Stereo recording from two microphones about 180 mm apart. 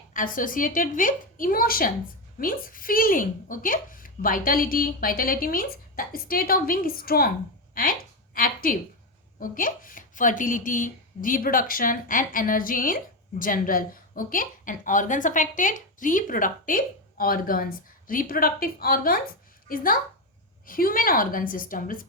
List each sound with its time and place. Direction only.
0.1 s a woman's voice: 50° left (ahead or behind)